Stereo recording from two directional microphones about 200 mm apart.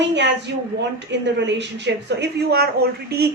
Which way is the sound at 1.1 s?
60° right (ahead or behind).